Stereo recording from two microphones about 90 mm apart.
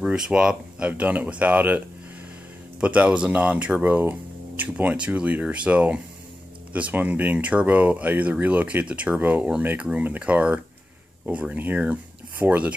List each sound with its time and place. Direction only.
0.0 s speech: 10° right (ahead or behind)
2.8 s speech: 15° right (ahead or behind)